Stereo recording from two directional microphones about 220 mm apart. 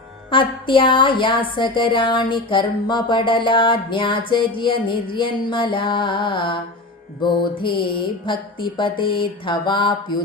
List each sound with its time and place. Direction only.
0.3 s speech: 25° left (ahead or behind)